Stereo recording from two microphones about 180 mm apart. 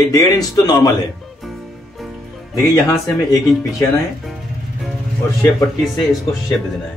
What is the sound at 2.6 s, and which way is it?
Speech, 20° left (ahead or behind).